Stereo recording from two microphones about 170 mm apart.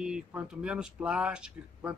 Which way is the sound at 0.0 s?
5° right (ahead or behind).